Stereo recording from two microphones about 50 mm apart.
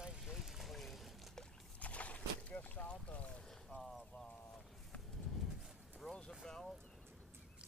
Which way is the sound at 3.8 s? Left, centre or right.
Centre.